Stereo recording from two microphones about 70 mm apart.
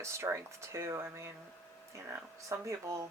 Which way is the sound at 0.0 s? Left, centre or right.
Right.